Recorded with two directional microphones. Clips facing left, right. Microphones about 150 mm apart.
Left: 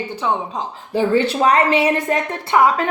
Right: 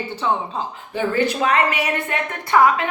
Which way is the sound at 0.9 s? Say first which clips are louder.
Left 4 dB; 30° left (ahead or behind).